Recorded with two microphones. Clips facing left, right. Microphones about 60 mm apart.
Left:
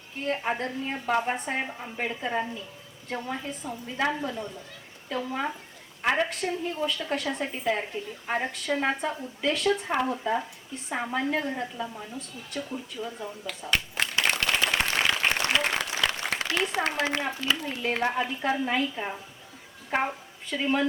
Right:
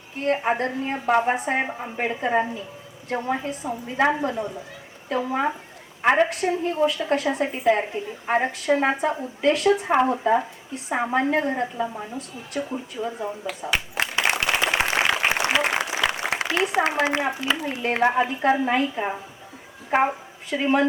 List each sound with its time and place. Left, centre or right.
0.3 s a woman's voice: right; by 7.4 s centre
7.4 s a woman's voice: centre
9.2 s a woman's voice: centre
9.9 s a woman's voice: right
13.5 s a sound: centre
15.0 s applause: right
16.8 s a woman's voice: centre